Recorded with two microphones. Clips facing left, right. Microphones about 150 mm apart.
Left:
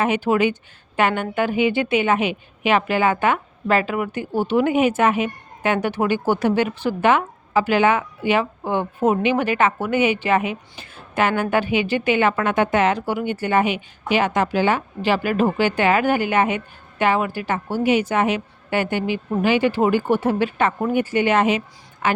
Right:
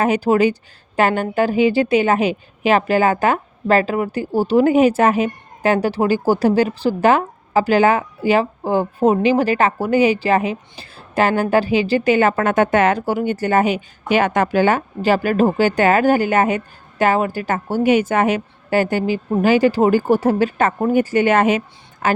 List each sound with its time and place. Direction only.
0.0 s a woman's voice: 40° right (ahead or behind)